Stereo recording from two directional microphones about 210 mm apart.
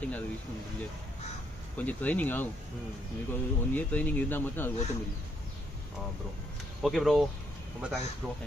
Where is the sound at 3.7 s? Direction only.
10° left (ahead or behind).